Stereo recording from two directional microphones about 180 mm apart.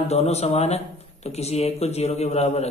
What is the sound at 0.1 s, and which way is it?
Speech, 35° left (ahead or behind).